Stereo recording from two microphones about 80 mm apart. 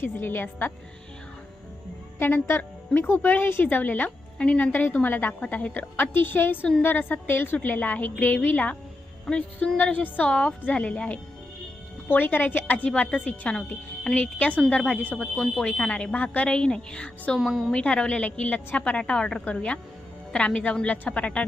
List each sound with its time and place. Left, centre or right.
0.0 s a woman's voice: left
2.1 s a woman's voice: left
9.2 s a woman's voice: centre
9.7 s a woman's voice: left
17.4 s a woman's voice: centre
17.7 s a woman's voice: centre